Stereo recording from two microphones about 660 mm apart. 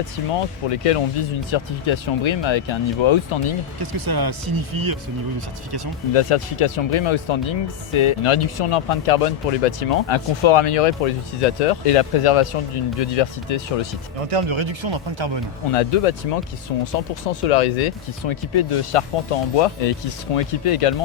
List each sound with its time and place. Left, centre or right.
0.3 s speech: left
3.9 s speech: right
6.1 s speech: left
10.1 s speech: left
14.2 s speech: right
15.7 s speech: left
16.7 s speech: left
17.5 s speech: left
18.3 s speech: left